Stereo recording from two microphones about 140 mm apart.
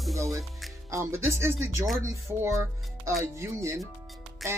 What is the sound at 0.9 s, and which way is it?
Speech, 20° right (ahead or behind).